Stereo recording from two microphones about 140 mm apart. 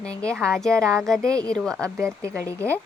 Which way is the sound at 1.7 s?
20° right (ahead or behind).